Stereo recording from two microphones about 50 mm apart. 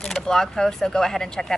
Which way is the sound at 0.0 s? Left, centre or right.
Centre.